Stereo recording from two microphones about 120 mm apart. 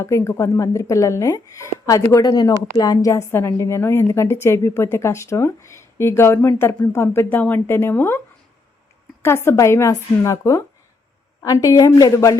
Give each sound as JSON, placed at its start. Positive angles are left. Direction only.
{"t": 0.0, "sound": "a woman's voice", "side_deg": 25}
{"t": 9.2, "sound": "a woman's voice", "side_deg": 20}